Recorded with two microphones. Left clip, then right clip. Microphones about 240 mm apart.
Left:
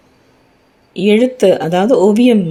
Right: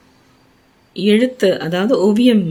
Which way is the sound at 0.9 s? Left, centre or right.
Centre.